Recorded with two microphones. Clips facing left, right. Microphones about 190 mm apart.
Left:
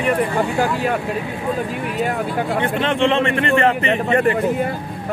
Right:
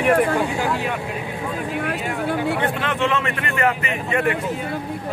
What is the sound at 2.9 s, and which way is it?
A man's voice, 30° left (ahead or behind).